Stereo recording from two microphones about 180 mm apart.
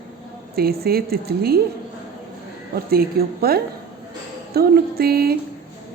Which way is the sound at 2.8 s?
60° right (ahead or behind).